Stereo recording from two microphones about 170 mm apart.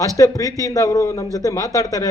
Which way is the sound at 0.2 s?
20° left (ahead or behind).